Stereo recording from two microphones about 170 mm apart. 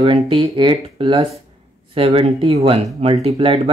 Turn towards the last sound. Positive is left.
turn(degrees=-30)  # may be behind; listen again after turning